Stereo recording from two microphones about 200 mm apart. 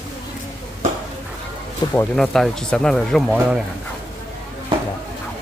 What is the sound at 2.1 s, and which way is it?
Speech, centre (ahead or behind).